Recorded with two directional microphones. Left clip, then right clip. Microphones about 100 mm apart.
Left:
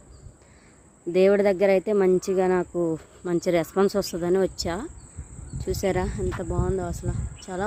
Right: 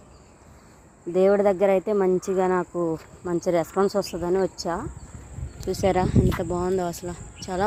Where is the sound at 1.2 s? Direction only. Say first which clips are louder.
Even; 70° left (ahead or behind).